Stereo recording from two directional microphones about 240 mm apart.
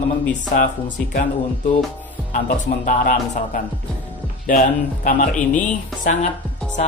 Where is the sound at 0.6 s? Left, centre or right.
Left.